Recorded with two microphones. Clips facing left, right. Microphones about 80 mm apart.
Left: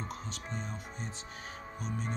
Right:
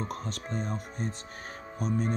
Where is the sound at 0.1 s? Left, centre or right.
Right.